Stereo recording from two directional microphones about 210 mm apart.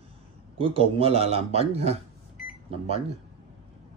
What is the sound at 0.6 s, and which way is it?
A man's voice, 25° right (ahead or behind).